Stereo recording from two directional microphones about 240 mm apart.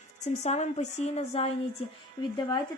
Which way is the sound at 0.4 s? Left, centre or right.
Left.